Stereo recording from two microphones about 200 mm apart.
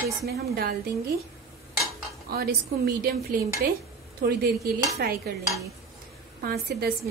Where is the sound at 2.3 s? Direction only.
50° right (ahead or behind).